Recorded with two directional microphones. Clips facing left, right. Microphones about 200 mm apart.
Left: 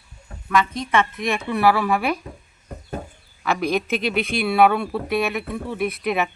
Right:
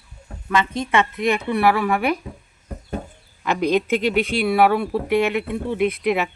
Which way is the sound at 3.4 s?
15° right (ahead or behind).